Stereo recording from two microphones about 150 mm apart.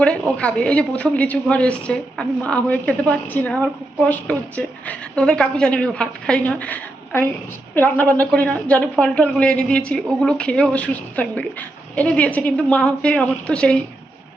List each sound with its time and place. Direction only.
0.0 s speech: 5° left (ahead or behind)